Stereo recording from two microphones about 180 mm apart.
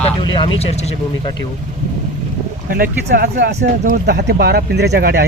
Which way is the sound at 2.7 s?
55° right (ahead or behind).